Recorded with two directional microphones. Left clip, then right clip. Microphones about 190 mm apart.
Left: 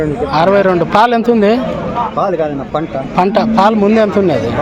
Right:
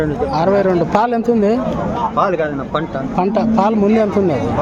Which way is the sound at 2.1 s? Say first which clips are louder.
Even; 30° left (ahead or behind).